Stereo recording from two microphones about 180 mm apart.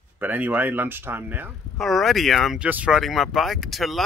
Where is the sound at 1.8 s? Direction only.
Centre (ahead or behind).